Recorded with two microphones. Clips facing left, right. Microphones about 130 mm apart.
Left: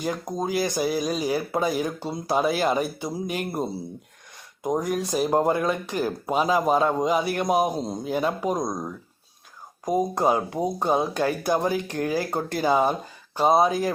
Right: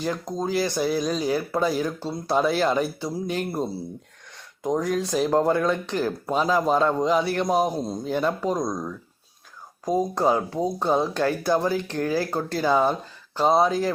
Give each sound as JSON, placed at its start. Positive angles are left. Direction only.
{"t": 0.0, "sound": "speech", "side_deg": 15}